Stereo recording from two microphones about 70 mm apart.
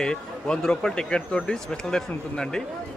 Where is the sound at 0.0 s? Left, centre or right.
Centre.